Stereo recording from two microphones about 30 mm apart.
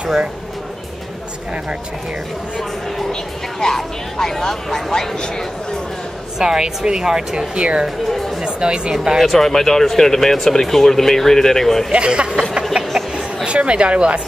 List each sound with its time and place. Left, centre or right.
3.1 s speech: centre
6.3 s a woman's voice: right
7.5 s a woman's voice: right
8.9 s a woman's voice: right
9.2 s speech: centre
11.9 s speech: right
12.7 s a sound: right
13.5 s speech: right